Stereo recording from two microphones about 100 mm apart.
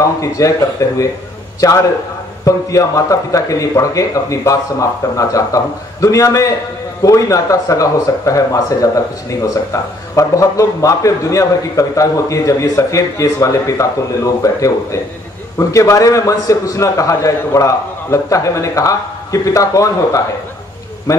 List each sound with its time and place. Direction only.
0.0 s speech: 35° left (ahead or behind)